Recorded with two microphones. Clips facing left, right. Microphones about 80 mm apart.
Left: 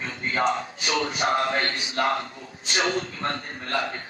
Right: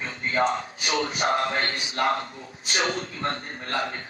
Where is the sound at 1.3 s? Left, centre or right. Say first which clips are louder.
Left 3 dB; left.